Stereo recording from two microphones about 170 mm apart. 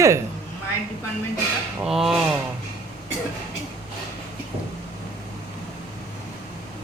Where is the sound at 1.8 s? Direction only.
Centre (ahead or behind).